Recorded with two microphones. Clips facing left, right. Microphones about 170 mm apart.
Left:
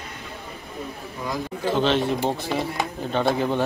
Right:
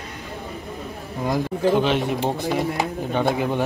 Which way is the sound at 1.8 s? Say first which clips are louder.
Even; 15° right (ahead or behind).